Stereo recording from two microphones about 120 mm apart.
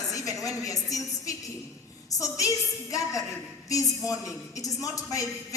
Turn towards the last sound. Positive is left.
turn(degrees=30)  # may be behind; listen again after turning